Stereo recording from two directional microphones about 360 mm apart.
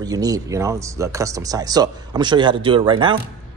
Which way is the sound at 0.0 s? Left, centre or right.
Centre.